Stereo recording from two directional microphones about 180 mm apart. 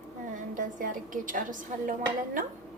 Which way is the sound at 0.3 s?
45° right (ahead or behind).